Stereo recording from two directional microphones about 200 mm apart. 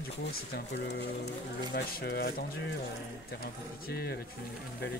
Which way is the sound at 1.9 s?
50° left (ahead or behind).